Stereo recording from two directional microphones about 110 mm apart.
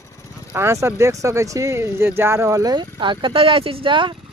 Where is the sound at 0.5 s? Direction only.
25° right (ahead or behind).